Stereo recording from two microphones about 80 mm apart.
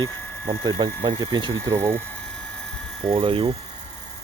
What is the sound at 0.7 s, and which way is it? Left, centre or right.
Speech, right.